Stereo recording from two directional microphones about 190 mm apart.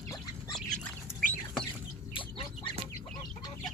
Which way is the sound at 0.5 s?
5° left (ahead or behind).